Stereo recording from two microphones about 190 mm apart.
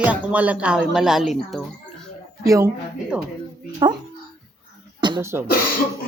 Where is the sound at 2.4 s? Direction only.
15° right (ahead or behind).